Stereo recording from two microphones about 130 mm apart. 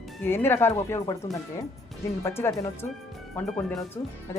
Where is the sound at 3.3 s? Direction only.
5° left (ahead or behind).